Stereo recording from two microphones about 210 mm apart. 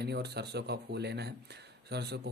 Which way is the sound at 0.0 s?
50° right (ahead or behind).